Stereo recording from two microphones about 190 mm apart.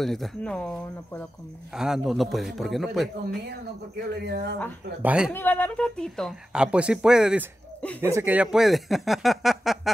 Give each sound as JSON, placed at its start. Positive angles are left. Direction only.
{"t": 0.0, "sound": "speech", "side_deg": 0}
{"t": 4.1, "sound": "speech", "side_deg": -60}
{"t": 5.0, "sound": "speech", "side_deg": -5}
{"t": 5.3, "sound": "speech", "side_deg": 10}